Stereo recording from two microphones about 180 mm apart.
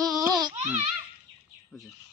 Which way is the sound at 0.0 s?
20° right (ahead or behind).